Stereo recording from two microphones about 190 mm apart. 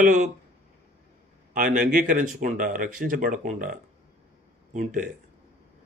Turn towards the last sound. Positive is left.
turn(degrees=-45)  # may be behind; listen again after turning